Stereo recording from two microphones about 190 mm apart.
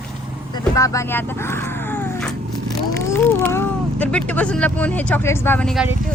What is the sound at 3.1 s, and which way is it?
Speech, 10° left (ahead or behind).